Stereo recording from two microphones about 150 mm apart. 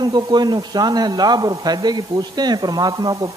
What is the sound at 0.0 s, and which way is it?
A man's voice, 25° right (ahead or behind).